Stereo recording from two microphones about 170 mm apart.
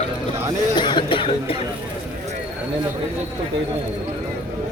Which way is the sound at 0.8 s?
25° left (ahead or behind).